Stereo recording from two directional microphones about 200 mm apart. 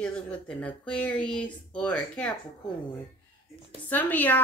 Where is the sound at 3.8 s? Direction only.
10° left (ahead or behind).